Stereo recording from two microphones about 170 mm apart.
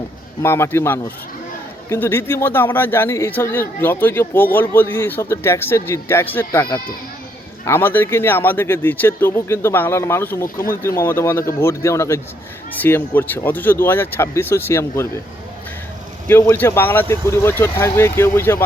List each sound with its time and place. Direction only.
0.4 s speech: 15° left (ahead or behind)
16.2 s speech: 15° left (ahead or behind)